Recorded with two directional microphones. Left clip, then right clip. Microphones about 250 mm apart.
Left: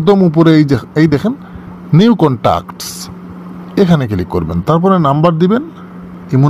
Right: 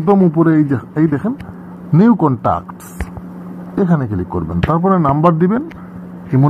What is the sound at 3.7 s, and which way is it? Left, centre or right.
A man's voice, left.